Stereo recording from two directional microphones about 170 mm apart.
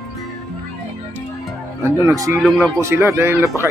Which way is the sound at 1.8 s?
20° right (ahead or behind).